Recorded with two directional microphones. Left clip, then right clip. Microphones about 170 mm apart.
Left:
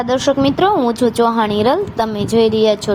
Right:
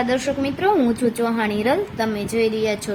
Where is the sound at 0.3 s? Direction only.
25° left (ahead or behind).